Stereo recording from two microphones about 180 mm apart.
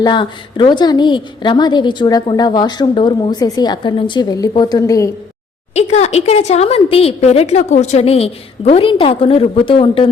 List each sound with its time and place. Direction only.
0.0 s a woman's voice: 25° left (ahead or behind)
5.7 s a woman's voice: 40° left (ahead or behind)